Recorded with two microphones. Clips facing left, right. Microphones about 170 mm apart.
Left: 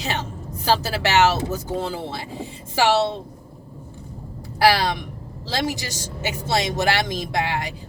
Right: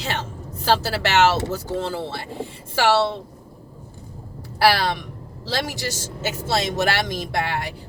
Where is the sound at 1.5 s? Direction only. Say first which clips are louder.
Even; 15° left (ahead or behind).